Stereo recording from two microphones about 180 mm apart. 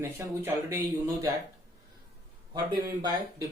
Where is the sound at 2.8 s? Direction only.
20° right (ahead or behind).